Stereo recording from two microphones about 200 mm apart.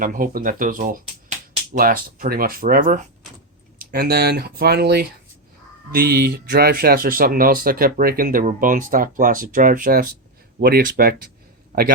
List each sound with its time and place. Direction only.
0.0 s speech: 45° right (ahead or behind)